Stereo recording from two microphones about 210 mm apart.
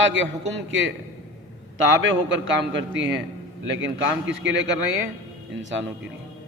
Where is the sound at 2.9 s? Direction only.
60° right (ahead or behind).